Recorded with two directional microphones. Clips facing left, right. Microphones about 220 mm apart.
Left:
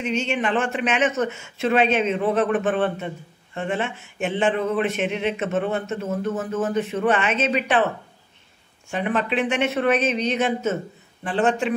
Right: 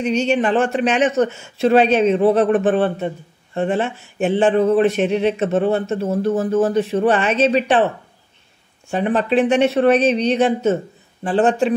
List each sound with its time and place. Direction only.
0.0 s speech: 35° right (ahead or behind)
8.9 s speech: 35° right (ahead or behind)